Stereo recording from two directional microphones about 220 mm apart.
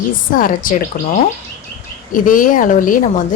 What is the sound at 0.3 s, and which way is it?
Speech, 40° left (ahead or behind).